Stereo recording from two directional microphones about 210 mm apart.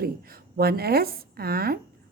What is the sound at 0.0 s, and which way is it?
Speech, 45° right (ahead or behind).